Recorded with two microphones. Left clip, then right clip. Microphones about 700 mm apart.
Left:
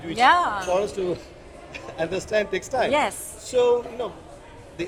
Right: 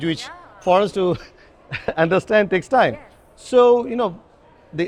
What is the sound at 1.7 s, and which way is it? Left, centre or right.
A man's voice, right.